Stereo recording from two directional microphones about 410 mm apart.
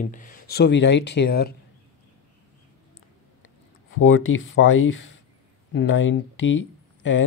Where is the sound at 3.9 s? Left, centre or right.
Left.